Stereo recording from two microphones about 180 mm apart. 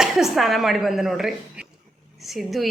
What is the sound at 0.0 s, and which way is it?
A woman's voice, centre (ahead or behind).